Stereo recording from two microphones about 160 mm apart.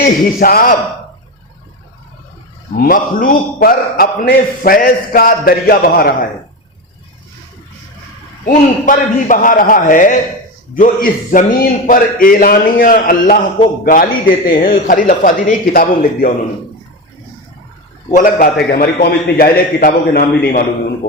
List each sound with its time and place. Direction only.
0.0 s a man's voice: 65° left (ahead or behind)
2.7 s a man's voice: 60° left (ahead or behind)
8.4 s a man's voice: 55° left (ahead or behind)
18.1 s a man's voice: 60° left (ahead or behind)